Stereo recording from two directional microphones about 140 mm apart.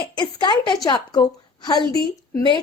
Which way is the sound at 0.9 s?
30° left (ahead or behind).